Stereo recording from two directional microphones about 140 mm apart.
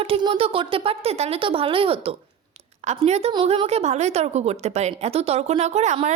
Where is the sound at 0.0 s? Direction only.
40° right (ahead or behind).